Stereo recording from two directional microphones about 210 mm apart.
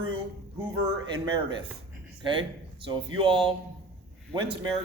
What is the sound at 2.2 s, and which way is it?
Speech, 25° right (ahead or behind).